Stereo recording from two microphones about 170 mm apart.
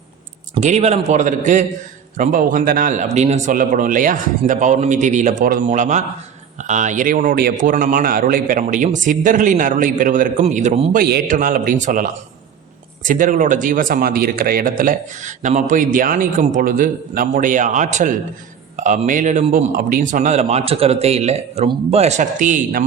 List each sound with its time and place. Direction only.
0.5 s a man's voice: 40° right (ahead or behind)
10.9 s a man's voice: 60° right (ahead or behind)
20.4 s speech: 40° right (ahead or behind)